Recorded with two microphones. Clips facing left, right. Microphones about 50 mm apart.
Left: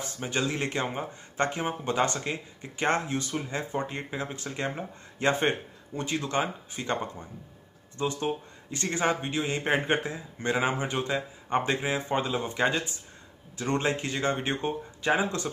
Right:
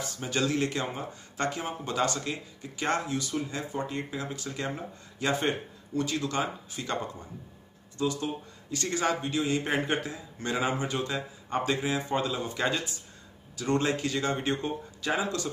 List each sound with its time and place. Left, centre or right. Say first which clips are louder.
0.0 s a man's voice: even; left